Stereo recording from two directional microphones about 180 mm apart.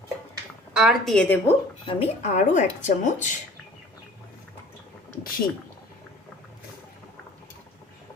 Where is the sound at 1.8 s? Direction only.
35° left (ahead or behind).